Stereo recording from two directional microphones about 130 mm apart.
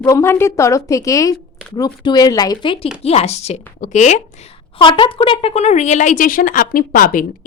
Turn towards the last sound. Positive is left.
turn(degrees=90)